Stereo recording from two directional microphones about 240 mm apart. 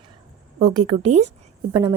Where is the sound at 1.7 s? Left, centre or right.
Right.